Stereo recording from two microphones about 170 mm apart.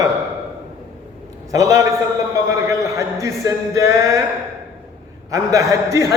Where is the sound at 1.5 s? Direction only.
20° right (ahead or behind).